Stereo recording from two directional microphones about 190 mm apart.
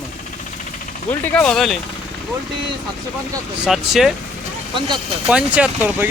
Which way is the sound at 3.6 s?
Centre (ahead or behind).